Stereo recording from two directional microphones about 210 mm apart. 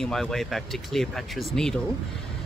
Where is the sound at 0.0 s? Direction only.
Centre (ahead or behind).